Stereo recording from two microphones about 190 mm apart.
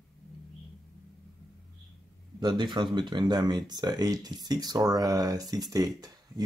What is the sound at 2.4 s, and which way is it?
Speech, 25° right (ahead or behind).